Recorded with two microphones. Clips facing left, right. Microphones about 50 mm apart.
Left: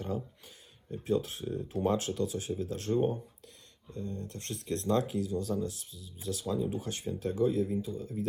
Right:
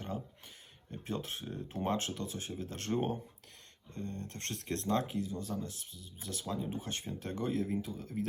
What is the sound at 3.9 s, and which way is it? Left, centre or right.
Speech, right.